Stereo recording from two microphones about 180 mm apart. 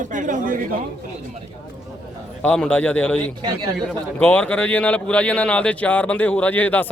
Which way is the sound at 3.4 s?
25° right (ahead or behind).